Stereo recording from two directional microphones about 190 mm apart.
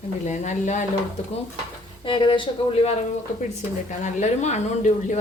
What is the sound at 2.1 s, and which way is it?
Speech, 25° left (ahead or behind).